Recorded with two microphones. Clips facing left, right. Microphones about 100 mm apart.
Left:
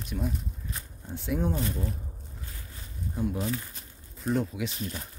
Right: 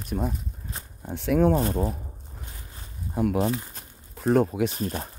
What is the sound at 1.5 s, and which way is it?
Speech, 45° right (ahead or behind).